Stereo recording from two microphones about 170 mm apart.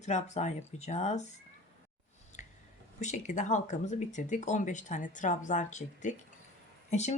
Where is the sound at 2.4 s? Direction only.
45° left (ahead or behind).